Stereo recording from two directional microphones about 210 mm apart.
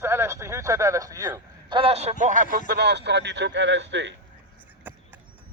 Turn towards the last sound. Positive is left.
turn(degrees=-55)  # may be behind; listen again after turning